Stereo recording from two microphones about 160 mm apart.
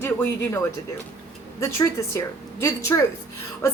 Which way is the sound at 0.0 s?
15° left (ahead or behind).